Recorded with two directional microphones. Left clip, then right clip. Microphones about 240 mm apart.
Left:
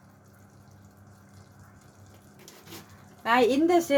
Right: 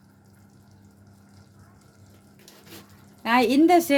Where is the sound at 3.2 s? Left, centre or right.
Right.